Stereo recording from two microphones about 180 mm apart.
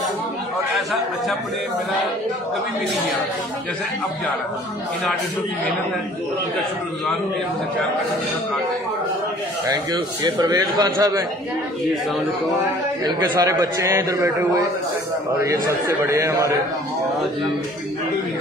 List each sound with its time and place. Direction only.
9.9 s a man's voice: 20° right (ahead or behind)
13.0 s a man's voice: 20° right (ahead or behind)